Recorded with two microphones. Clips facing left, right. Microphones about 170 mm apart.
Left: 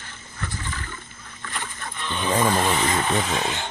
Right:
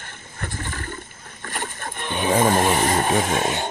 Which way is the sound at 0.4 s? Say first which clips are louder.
Right 2 dB; 50° right (ahead or behind).